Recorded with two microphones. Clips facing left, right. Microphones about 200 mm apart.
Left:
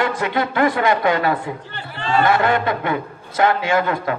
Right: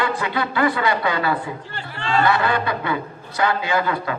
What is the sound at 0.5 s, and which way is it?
A man's voice, 45° left (ahead or behind).